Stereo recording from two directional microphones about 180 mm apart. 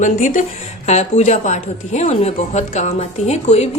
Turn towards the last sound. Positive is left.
turn(degrees=35)  # may be behind; listen again after turning